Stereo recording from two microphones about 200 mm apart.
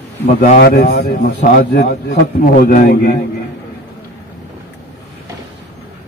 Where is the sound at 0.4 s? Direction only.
50° left (ahead or behind).